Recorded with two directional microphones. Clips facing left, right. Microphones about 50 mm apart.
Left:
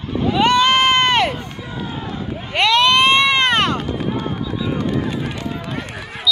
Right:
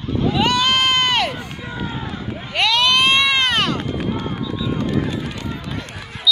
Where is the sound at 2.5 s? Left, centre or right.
Left.